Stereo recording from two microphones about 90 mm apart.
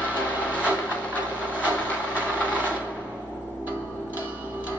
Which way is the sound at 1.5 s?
20° left (ahead or behind).